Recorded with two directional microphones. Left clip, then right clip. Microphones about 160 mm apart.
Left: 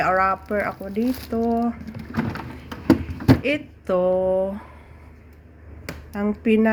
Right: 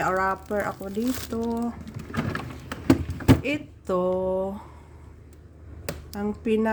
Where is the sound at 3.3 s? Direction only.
5° right (ahead or behind).